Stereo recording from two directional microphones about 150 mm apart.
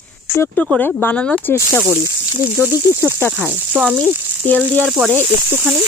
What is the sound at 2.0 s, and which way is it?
Speech, 20° left (ahead or behind).